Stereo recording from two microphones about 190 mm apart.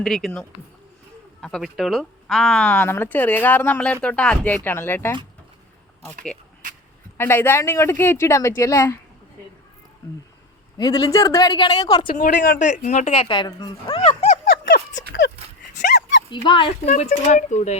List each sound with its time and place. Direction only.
0.0 s speech: centre (ahead or behind)
7.2 s speech: 10° left (ahead or behind)
10.8 s speech: 20° left (ahead or behind)
12.1 s speech: 45° left (ahead or behind)
15.2 s a sound: 60° left (ahead or behind)
15.7 s dog: 40° left (ahead or behind)
16.3 s speech: 25° left (ahead or behind)
16.9 s speech: 40° left (ahead or behind)